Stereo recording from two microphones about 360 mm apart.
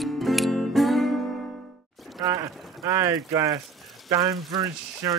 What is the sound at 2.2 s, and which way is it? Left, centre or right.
Speech, centre.